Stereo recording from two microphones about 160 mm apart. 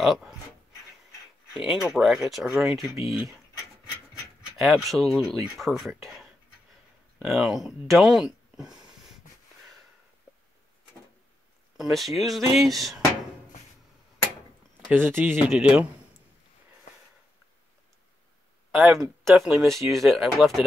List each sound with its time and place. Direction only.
0.0 s speech: centre (ahead or behind)
1.5 s speech: 5° right (ahead or behind)
4.6 s speech: centre (ahead or behind)
10.3 s a sound: 5° right (ahead or behind)
11.7 s speech: centre (ahead or behind)
14.9 s speech: 15° right (ahead or behind)
18.8 s speech: centre (ahead or behind)